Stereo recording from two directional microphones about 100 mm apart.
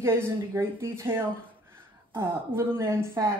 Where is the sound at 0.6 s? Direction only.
25° right (ahead or behind).